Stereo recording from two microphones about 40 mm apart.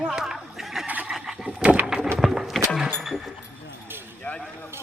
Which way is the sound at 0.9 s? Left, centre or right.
Right.